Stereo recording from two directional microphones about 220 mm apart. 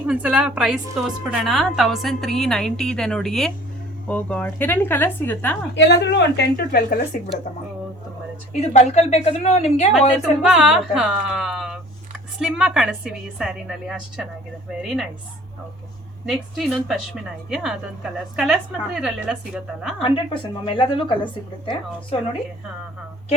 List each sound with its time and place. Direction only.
0.0 s a woman's voice: 5° right (ahead or behind)
5.7 s a woman's voice: 50° left (ahead or behind)
8.7 s speech: 30° left (ahead or behind)
9.9 s a woman's voice: centre (ahead or behind)
16.2 s a woman's voice: centre (ahead or behind)
20.0 s speech: 25° left (ahead or behind)